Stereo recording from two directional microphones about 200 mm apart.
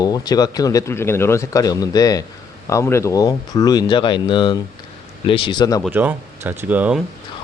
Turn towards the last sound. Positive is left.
turn(degrees=-5)  # may be behind; listen again after turning